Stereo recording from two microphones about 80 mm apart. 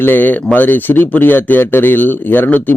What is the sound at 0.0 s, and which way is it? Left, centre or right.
A man's voice, left.